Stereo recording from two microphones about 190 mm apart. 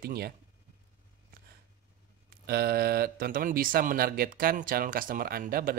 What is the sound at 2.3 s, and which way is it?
Speech, 55° right (ahead or behind).